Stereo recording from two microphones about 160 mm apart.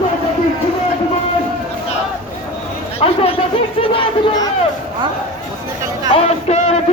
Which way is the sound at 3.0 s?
35° left (ahead or behind).